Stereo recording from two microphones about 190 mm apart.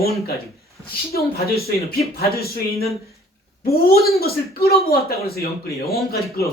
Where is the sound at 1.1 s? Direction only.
55° left (ahead or behind).